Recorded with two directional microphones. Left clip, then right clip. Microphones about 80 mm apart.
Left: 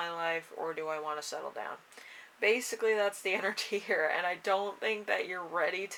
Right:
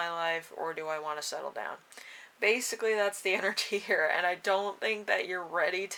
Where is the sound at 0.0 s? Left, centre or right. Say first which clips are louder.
Right 2 dB; right.